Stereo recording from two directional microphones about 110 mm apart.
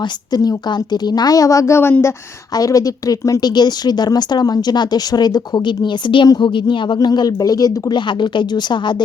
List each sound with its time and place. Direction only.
0.3 s speech: 40° left (ahead or behind)